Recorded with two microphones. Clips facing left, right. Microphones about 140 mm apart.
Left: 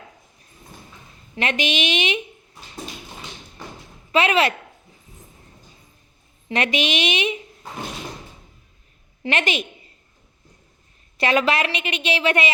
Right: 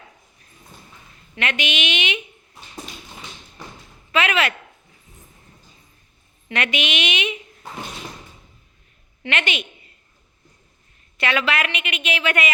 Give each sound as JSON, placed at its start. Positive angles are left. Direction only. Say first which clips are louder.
{"t": 1.4, "sound": "a woman's voice", "louder": "left 3 dB", "side_deg": 35}
{"t": 4.1, "sound": "a woman's voice", "louder": "left 3 dB", "side_deg": 35}
{"t": 6.5, "sound": "a woman's voice", "louder": "left 3 dB", "side_deg": 35}
{"t": 9.2, "sound": "a woman's voice", "louder": "left 3 dB", "side_deg": 35}
{"t": 11.2, "sound": "a woman's voice", "louder": "left 3 dB", "side_deg": 40}